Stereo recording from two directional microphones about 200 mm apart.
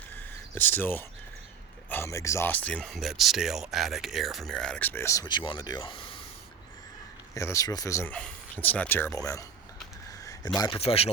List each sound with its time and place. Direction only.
0.5 s speech: 10° left (ahead or behind); by 6.1 s 25° left (ahead or behind)
7.3 s speech: 15° left (ahead or behind)
10.8 s speech: 30° left (ahead or behind)